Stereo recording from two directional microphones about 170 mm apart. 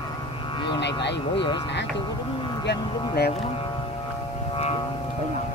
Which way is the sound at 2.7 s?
70° left (ahead or behind).